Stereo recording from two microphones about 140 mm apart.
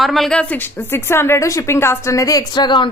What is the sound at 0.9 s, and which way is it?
A woman's voice, 15° left (ahead or behind).